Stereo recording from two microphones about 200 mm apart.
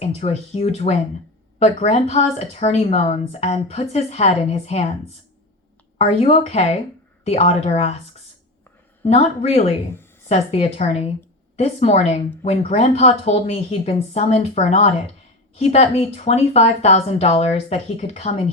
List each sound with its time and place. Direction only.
0.0 s a woman's voice: 30° left (ahead or behind)
6.0 s a woman's voice: 30° left (ahead or behind)
9.0 s a woman's voice: 30° left (ahead or behind)